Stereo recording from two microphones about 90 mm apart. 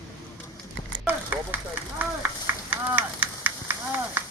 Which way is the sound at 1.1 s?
20° right (ahead or behind).